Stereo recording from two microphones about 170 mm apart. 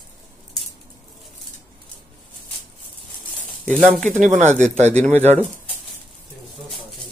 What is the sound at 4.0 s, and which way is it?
Speech, 45° right (ahead or behind).